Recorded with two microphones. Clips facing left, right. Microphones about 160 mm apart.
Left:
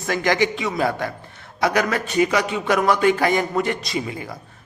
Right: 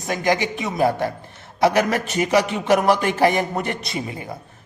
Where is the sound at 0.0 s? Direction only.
20° right (ahead or behind).